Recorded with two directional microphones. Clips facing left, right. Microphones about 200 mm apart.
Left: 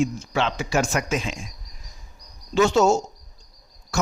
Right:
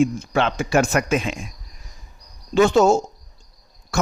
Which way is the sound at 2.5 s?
55° right (ahead or behind).